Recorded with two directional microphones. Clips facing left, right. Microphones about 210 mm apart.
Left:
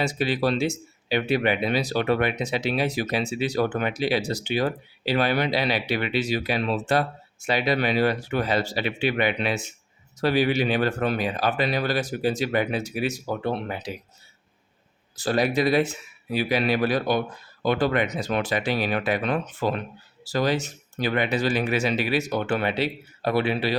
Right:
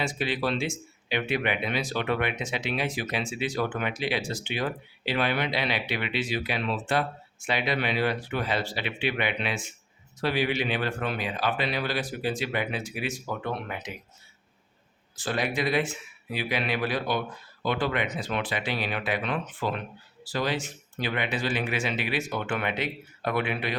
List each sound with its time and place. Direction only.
0.0 s speech: 40° left (ahead or behind)
15.1 s speech: 40° left (ahead or behind)